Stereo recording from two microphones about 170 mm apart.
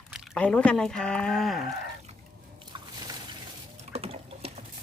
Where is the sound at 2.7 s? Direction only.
25° right (ahead or behind).